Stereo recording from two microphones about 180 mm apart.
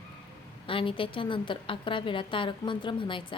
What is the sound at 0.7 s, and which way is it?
A woman's voice, 30° left (ahead or behind).